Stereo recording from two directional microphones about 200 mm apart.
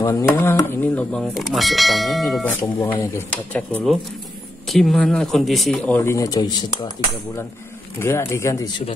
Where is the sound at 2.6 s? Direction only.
15° left (ahead or behind).